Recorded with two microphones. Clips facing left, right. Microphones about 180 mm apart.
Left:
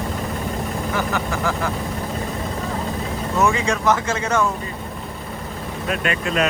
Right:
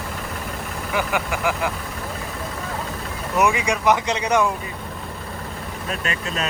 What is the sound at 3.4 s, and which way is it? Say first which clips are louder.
Speech: even; 15° right (ahead or behind).